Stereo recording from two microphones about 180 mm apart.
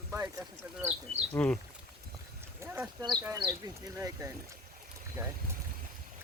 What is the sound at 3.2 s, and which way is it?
Speech, 20° right (ahead or behind).